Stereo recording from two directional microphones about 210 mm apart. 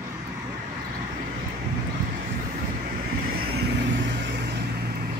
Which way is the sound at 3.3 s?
50° right (ahead or behind).